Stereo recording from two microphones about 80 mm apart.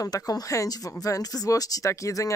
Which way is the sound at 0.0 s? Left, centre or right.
Left.